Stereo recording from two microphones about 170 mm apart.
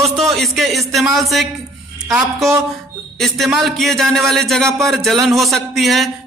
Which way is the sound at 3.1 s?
Centre (ahead or behind).